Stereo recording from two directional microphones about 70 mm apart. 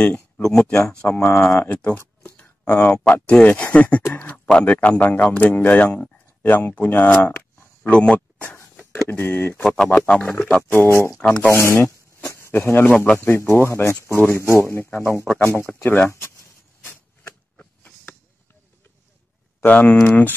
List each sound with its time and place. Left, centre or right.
0.4 s speech: centre
1.0 s a man's voice: left
7.9 s speech: centre
9.2 s speech: left
9.6 s speech: centre
10.6 s speech: left
11.1 s speech: centre
11.5 s speech: left
12.3 s a sound: left
12.5 s a man's voice: left
12.9 s a man's voice: centre
13.4 s a man's voice: left
16.1 s speech: left
19.6 s a man's voice: left